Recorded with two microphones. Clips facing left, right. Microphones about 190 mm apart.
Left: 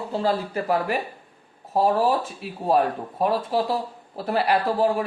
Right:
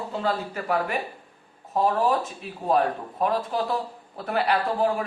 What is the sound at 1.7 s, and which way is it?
A man's voice, 30° left (ahead or behind).